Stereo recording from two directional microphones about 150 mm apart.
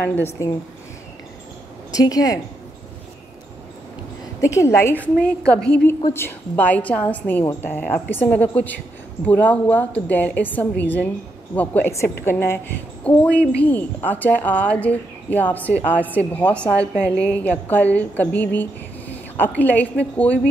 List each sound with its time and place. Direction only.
0.0 s a woman's voice: 15° left (ahead or behind)
1.9 s a woman's voice: 25° left (ahead or behind)
4.4 s a woman's voice: 20° left (ahead or behind)